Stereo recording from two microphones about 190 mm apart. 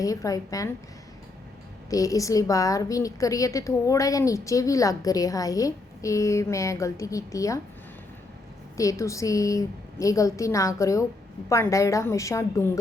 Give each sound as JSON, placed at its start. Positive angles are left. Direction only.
{"t": 0.0, "sound": "a woman's voice", "side_deg": 20}
{"t": 1.9, "sound": "a woman's voice", "side_deg": 15}
{"t": 8.7, "sound": "a woman's voice", "side_deg": 15}